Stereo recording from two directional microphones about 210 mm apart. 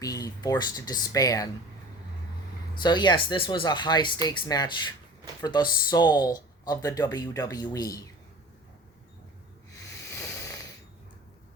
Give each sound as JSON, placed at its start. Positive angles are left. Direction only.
{"t": 0.0, "sound": "speech", "side_deg": 15}
{"t": 2.7, "sound": "speech", "side_deg": 20}
{"t": 10.0, "sound": "a sound", "side_deg": 15}